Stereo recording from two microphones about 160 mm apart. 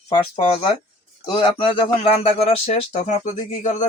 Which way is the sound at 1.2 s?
30° left (ahead or behind).